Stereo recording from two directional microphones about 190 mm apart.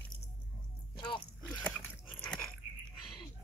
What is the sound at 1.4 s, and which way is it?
Biting, 5° left (ahead or behind).